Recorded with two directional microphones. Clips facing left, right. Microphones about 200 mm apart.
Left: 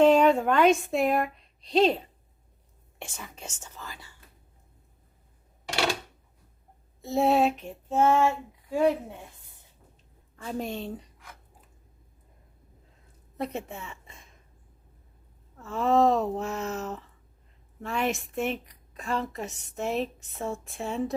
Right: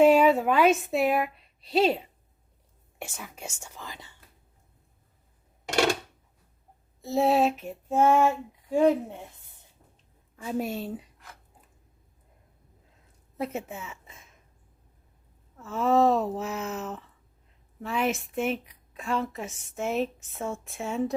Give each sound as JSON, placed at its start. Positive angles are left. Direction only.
{"t": 0.0, "sound": "a woman's voice", "side_deg": -10}
{"t": 7.0, "sound": "a woman's voice", "side_deg": 0}
{"t": 10.3, "sound": "a woman's voice", "side_deg": -5}
{"t": 13.3, "sound": "a woman's voice", "side_deg": 0}
{"t": 15.5, "sound": "a woman's voice", "side_deg": 0}